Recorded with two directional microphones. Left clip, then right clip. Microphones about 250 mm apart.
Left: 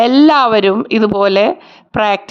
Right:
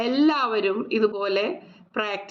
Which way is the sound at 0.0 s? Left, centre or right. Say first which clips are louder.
Left 13 dB; left.